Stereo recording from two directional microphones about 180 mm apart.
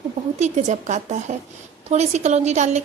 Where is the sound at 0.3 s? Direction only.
40° right (ahead or behind).